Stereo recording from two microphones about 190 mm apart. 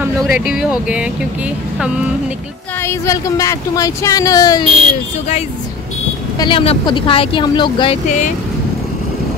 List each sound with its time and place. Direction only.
0.0 s speech: 5° right (ahead or behind)
2.8 s speech: 15° left (ahead or behind)
6.3 s speech: 25° left (ahead or behind)